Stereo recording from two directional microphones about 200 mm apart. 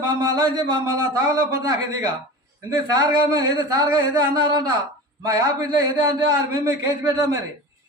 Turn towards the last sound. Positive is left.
turn(degrees=-20)  # may be behind; listen again after turning